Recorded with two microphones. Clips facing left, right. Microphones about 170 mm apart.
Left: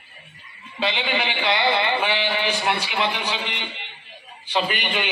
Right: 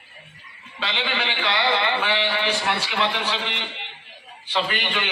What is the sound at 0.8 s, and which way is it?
A man's voice, 15° left (ahead or behind).